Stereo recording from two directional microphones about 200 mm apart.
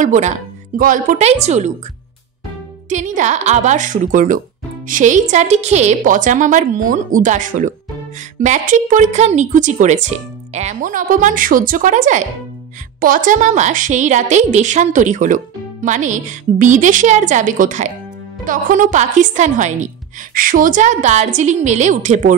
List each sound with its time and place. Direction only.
0.0 s a woman's voice: 40° right (ahead or behind)
2.9 s a woman's voice: 40° right (ahead or behind)